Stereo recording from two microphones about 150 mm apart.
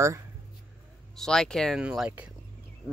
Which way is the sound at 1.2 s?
5° left (ahead or behind).